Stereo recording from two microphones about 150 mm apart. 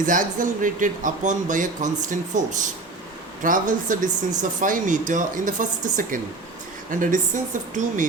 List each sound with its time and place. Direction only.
0.0 s speech: 60° right (ahead or behind)